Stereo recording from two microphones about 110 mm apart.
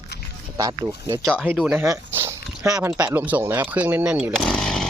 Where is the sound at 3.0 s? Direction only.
15° right (ahead or behind).